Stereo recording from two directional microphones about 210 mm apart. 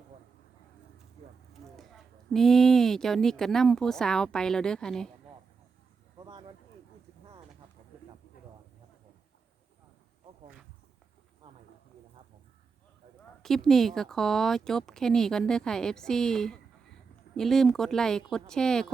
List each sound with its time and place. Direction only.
1.7 s a woman's voice: centre (ahead or behind)
11.4 s a sound: 25° right (ahead or behind)
13.4 s a woman's voice: centre (ahead or behind)